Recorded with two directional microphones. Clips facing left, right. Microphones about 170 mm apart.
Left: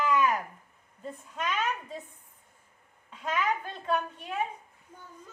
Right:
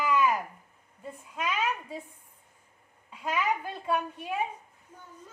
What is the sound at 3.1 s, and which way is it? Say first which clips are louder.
A child's voice: even; 10° right (ahead or behind).